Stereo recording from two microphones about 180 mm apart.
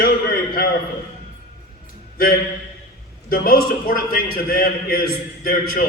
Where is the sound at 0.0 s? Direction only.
55° left (ahead or behind).